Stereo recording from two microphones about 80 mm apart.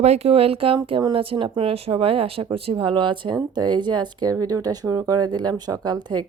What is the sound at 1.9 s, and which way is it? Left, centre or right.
Speech, right.